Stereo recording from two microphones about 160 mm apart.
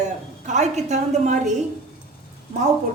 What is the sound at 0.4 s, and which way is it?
Speech, 45° right (ahead or behind).